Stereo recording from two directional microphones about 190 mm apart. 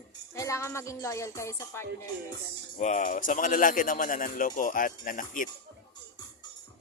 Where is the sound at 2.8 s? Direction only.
40° left (ahead or behind).